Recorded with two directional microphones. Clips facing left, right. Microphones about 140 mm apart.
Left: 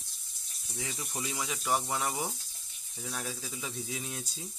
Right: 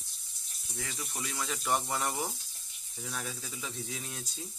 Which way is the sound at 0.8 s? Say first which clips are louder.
Left 2 dB; 20° left (ahead or behind).